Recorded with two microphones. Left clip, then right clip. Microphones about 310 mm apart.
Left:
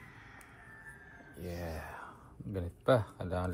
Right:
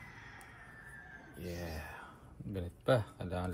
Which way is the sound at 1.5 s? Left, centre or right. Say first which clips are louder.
Left 2 dB; centre.